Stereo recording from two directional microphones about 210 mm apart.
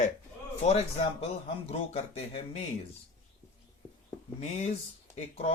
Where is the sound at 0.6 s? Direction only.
30° left (ahead or behind).